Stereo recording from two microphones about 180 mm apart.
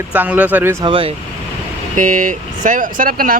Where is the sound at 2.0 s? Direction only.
45° right (ahead or behind).